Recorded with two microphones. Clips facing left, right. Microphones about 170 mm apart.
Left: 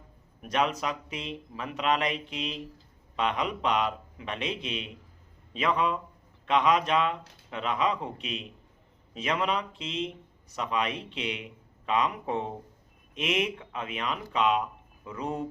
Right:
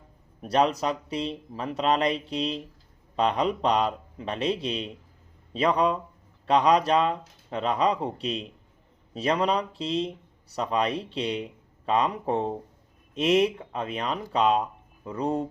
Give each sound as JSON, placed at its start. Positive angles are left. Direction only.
{"t": 0.4, "sound": "speech", "side_deg": -35}